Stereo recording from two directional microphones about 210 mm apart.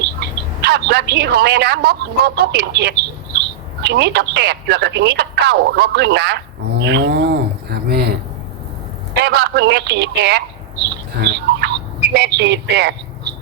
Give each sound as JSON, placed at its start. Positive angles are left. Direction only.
{"t": 0.0, "sound": "speech", "side_deg": -50}
{"t": 9.1, "sound": "a man's voice", "side_deg": -50}